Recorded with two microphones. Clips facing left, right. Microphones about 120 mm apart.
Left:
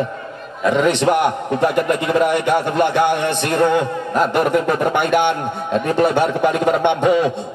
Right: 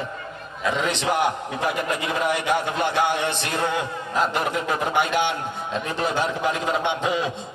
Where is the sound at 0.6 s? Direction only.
55° left (ahead or behind).